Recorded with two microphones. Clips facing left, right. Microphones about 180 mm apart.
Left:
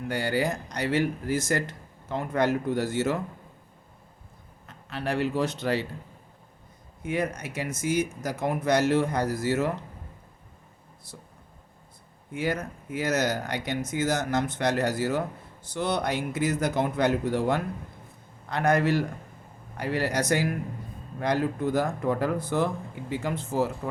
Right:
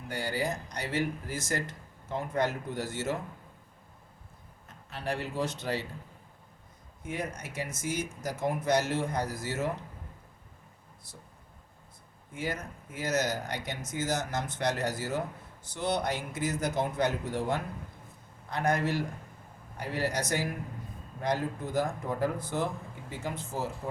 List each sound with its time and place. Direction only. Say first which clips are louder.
0.1 s speech: left 5 dB; 70° left (ahead or behind)
4.9 s speech: left 7 dB; 70° left (ahead or behind)
7.0 s speech: left 7 dB; 65° left (ahead or behind)
12.3 s speech: left 6 dB; 65° left (ahead or behind)